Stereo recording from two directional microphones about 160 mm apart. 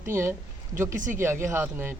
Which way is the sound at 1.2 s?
15° right (ahead or behind).